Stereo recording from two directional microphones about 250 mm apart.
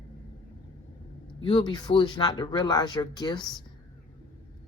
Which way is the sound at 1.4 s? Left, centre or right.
Centre.